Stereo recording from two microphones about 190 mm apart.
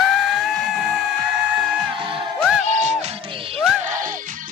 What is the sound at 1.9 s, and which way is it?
Music, 25° right (ahead or behind).